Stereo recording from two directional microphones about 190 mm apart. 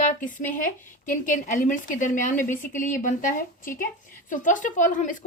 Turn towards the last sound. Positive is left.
turn(degrees=40)  # may be behind; listen again after turning